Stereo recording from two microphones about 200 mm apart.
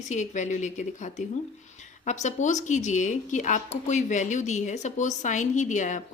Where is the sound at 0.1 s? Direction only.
35° left (ahead or behind).